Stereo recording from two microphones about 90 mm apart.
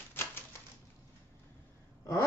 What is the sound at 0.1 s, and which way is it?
Typewriter, 25° left (ahead or behind).